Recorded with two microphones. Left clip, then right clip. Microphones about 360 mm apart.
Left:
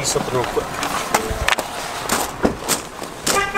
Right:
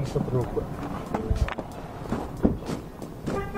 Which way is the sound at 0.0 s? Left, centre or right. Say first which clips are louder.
Left 9 dB; centre.